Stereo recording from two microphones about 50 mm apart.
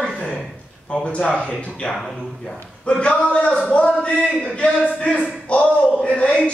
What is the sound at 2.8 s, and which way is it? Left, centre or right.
A man's voice, left.